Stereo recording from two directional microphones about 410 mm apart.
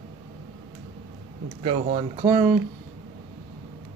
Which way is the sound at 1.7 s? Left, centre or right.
Centre.